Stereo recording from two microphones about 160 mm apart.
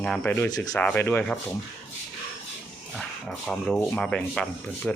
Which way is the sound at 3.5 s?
5° left (ahead or behind).